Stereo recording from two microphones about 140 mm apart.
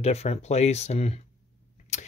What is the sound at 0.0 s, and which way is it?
Speech, 50° left (ahead or behind).